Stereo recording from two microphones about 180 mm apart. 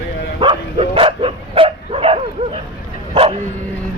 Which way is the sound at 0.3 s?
30° right (ahead or behind).